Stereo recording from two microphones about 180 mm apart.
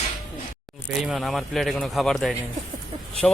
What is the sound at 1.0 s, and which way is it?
Speech, centre (ahead or behind).